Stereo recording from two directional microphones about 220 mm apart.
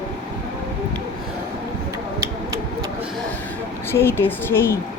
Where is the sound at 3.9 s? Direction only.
10° left (ahead or behind).